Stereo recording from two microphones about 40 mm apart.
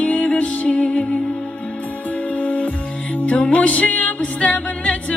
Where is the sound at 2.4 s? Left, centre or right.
Left.